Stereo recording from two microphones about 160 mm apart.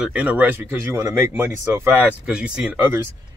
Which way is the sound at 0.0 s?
10° right (ahead or behind).